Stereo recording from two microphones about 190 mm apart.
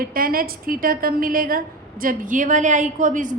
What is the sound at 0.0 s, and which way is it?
A woman's voice, 50° right (ahead or behind).